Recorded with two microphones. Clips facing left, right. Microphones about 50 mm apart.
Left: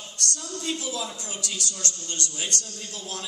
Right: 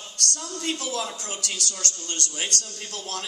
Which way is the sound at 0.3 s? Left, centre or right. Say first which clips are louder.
Right 1 dB; right.